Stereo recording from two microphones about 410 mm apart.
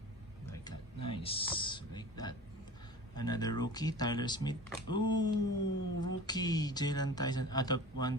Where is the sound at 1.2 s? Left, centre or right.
Centre.